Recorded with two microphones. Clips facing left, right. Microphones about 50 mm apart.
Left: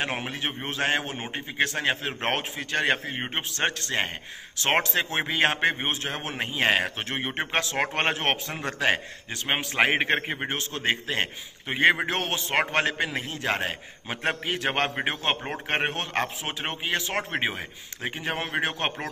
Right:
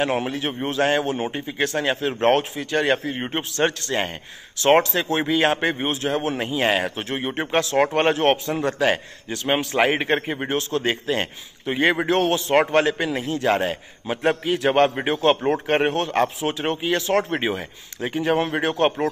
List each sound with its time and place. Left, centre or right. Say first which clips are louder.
0.0 s a man's voice: right 7 dB; left